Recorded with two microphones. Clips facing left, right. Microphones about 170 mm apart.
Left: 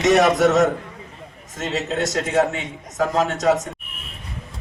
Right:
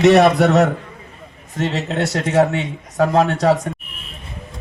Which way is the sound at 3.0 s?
60° right (ahead or behind).